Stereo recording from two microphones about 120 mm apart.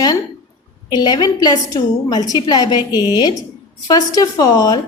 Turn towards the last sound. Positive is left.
turn(degrees=30)  # may be behind; listen again after turning